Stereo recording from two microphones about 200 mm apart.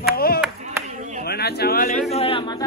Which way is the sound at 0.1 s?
50° left (ahead or behind).